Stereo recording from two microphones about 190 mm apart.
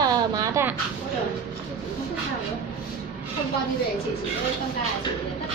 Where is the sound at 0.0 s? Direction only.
15° right (ahead or behind).